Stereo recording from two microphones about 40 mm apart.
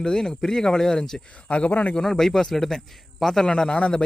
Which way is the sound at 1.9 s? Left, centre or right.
Centre.